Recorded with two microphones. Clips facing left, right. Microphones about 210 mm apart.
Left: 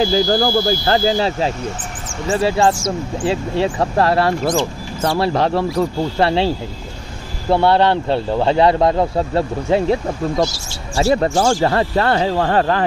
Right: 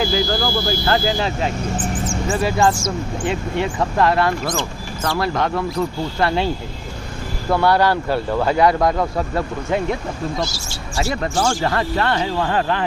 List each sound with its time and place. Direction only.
0.0 s speech: 35° left (ahead or behind)
11.0 s speech: 30° left (ahead or behind)